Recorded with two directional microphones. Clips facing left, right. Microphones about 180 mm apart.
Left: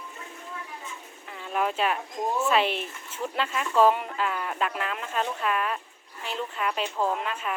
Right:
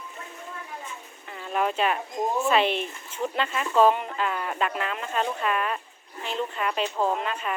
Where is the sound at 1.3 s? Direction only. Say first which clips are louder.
Right 1 dB; centre (ahead or behind).